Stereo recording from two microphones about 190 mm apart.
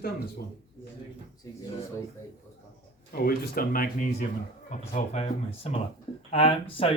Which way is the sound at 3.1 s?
50° left (ahead or behind).